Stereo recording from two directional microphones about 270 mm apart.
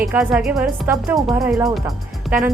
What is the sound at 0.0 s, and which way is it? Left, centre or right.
Speech, centre.